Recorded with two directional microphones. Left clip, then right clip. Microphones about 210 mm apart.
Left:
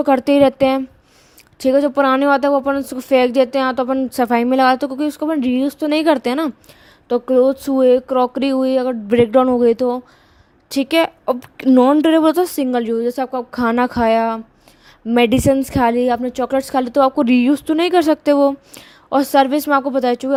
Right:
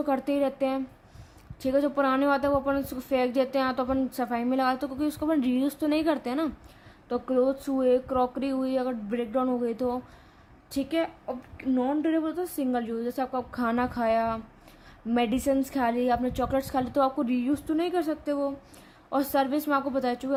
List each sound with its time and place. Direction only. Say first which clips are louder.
0.0 s speech: left 14 dB; 40° left (ahead or behind)